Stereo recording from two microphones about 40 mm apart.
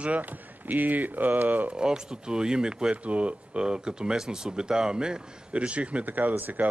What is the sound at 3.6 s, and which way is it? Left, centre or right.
A man's voice, right.